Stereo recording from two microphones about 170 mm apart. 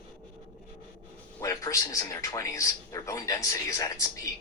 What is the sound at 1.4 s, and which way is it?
A man's voice, 20° left (ahead or behind).